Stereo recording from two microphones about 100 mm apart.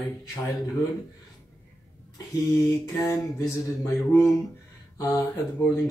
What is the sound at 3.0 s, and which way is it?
Speech, 30° left (ahead or behind).